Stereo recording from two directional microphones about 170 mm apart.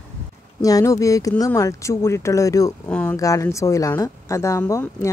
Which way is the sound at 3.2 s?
20° left (ahead or behind).